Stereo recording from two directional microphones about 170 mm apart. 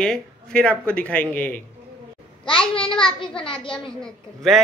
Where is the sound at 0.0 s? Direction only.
5° left (ahead or behind).